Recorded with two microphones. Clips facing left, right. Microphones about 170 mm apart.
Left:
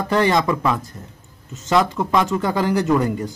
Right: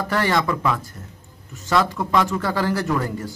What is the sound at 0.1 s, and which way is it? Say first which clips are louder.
A man's voice: left 4 dB; 20° left (ahead or behind).